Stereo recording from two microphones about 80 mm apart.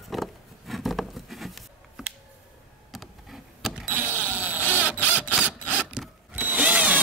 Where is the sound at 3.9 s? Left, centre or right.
Right.